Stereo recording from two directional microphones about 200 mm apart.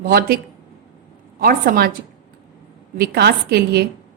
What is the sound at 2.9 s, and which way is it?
Speech, 50° right (ahead or behind).